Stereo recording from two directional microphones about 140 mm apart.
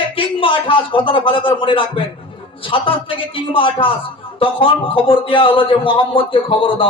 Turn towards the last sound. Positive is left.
turn(degrees=40)  # may be behind; listen again after turning